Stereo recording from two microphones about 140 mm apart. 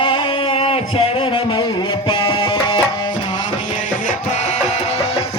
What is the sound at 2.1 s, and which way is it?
Music, 35° left (ahead or behind).